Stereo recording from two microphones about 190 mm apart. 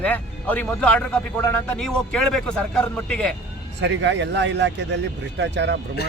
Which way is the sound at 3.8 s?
70° right (ahead or behind).